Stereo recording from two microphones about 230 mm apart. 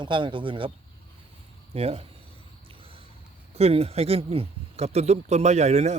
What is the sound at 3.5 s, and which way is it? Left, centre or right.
Speech, right.